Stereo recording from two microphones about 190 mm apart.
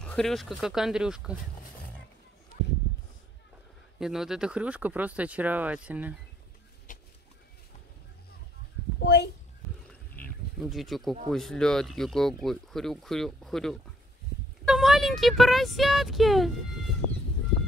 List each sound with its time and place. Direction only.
0.0 s speech: 5° left (ahead or behind)
4.0 s speech: centre (ahead or behind)
6.9 s a sound: 45° left (ahead or behind)
9.0 s speech: 60° left (ahead or behind)
10.6 s speech: centre (ahead or behind)